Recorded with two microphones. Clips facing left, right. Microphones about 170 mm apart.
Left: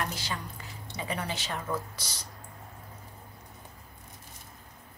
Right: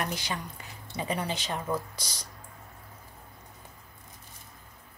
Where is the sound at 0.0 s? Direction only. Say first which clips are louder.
Right 2 dB; 15° right (ahead or behind).